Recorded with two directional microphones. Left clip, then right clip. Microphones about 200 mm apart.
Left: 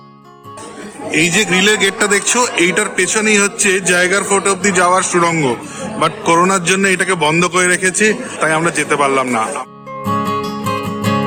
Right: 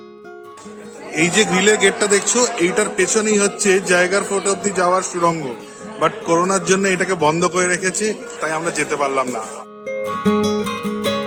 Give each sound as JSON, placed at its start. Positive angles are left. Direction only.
{"t": 1.1, "sound": "a man's voice", "side_deg": 0}
{"t": 10.1, "sound": "music", "side_deg": 60}